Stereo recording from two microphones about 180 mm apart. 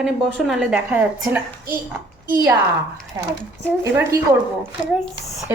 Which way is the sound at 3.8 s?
15° right (ahead or behind).